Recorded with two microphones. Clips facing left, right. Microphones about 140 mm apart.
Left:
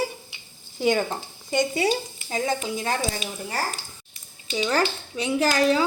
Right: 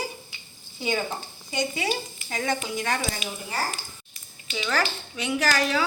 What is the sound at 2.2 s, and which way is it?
Speech, 25° left (ahead or behind).